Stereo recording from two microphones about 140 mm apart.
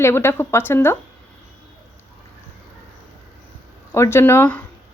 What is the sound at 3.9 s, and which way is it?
Speech, 20° left (ahead or behind).